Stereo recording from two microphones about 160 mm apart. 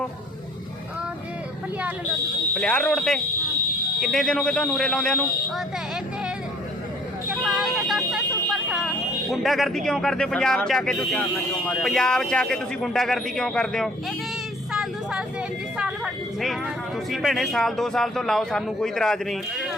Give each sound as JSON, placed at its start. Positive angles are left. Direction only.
{"t": 2.6, "sound": "a man's voice", "side_deg": 5}
{"t": 7.3, "sound": "a man's voice", "side_deg": 0}
{"t": 14.7, "sound": "vehicle", "side_deg": -5}
{"t": 15.8, "sound": "a man's voice", "side_deg": 0}